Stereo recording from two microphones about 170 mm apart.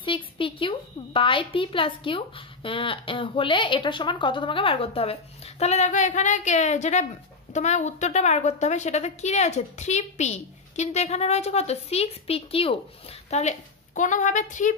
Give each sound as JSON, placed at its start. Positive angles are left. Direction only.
{"t": 0.0, "sound": "a woman's voice", "side_deg": 30}